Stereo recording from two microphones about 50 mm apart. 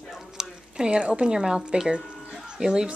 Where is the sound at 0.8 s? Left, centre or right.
Centre.